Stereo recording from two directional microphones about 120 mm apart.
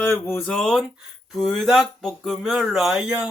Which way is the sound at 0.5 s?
5° left (ahead or behind).